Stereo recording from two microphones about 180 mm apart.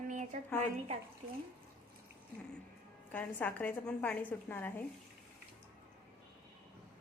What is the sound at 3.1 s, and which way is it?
A woman's voice, 10° left (ahead or behind).